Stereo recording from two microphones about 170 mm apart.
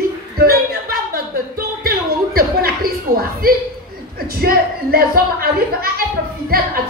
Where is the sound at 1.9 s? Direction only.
65° right (ahead or behind).